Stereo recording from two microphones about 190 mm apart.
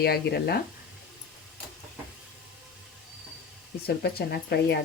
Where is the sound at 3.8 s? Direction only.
60° left (ahead or behind).